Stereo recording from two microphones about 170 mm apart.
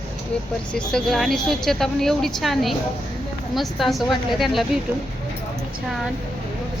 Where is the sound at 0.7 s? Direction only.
5° left (ahead or behind).